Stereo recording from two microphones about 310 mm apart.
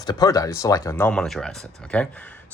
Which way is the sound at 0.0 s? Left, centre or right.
Centre.